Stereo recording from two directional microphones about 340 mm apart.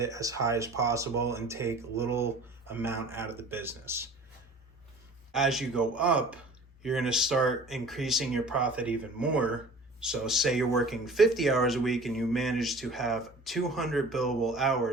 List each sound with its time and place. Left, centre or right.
0.0 s speech: centre
5.3 s speech: centre